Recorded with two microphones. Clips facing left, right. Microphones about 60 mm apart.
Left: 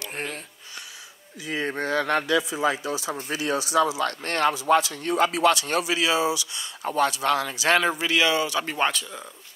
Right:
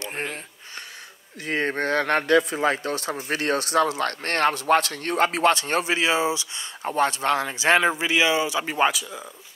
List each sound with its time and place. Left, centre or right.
0.0 s speech: right
1.4 s a man's voice: right; by 9.2 s centre